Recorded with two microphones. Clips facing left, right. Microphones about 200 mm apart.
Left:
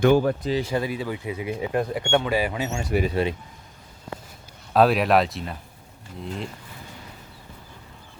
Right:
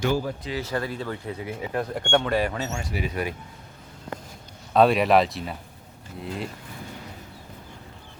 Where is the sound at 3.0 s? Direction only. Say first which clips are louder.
Left 5 dB; 25° left (ahead or behind).